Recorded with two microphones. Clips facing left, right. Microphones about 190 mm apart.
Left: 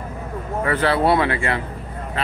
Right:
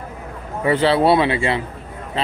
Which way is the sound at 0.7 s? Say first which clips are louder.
Right 4 dB; 25° right (ahead or behind).